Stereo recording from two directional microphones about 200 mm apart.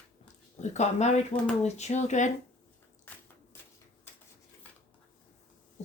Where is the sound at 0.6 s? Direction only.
35° left (ahead or behind).